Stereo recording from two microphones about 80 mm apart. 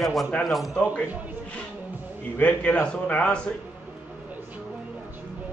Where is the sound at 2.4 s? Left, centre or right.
Centre.